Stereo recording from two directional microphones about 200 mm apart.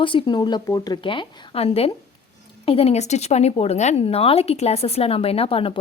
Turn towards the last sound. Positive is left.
turn(degrees=30)  # may be behind; listen again after turning